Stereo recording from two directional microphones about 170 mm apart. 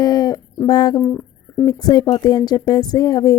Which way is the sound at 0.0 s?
20° left (ahead or behind).